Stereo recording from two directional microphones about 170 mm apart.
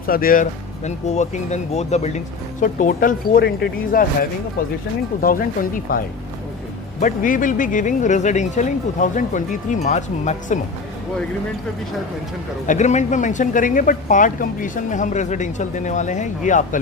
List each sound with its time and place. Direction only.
0.0 s speech: 60° left (ahead or behind)
0.9 s speech: 45° left (ahead or behind)
7.0 s speech: 50° left (ahead or behind)
12.6 s speech: 45° left (ahead or behind)